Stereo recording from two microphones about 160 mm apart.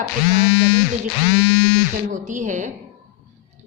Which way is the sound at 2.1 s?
50° right (ahead or behind).